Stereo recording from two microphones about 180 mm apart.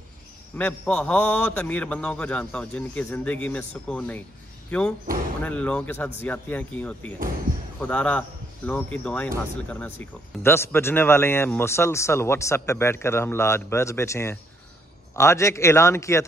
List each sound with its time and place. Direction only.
0.6 s speech: 5° left (ahead or behind)